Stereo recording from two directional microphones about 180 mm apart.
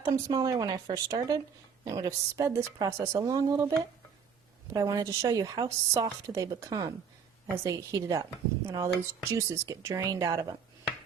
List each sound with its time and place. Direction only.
0.0 s a woman's voice: 20° right (ahead or behind)